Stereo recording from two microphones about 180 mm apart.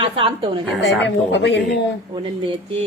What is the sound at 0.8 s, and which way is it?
Speech, 80° left.